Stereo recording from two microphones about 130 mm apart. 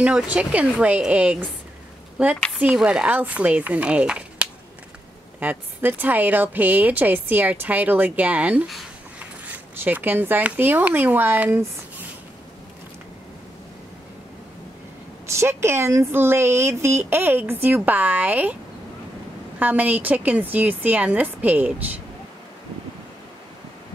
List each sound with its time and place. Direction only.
0.0 s speech: 10° right (ahead or behind)
15.3 s speech: 20° right (ahead or behind)
19.6 s speech: 10° right (ahead or behind)